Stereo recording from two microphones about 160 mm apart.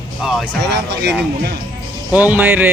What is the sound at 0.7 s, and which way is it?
Speech, 90° right.